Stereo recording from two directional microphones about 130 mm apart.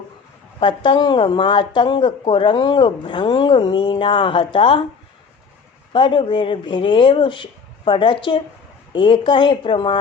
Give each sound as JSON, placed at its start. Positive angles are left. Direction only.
{"t": 0.6, "sound": "a woman's voice", "side_deg": 40}
{"t": 5.9, "sound": "a woman's voice", "side_deg": 40}